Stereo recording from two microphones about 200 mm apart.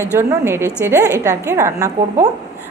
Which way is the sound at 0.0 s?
10° right (ahead or behind).